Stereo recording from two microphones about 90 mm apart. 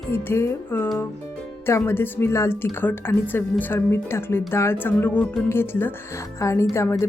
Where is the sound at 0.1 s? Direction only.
25° left (ahead or behind).